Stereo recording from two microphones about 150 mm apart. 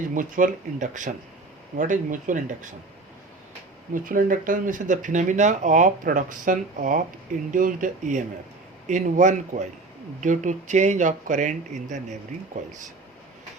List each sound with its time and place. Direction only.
0.0 s speech: 60° right (ahead or behind)
3.9 s speech: 65° right (ahead or behind)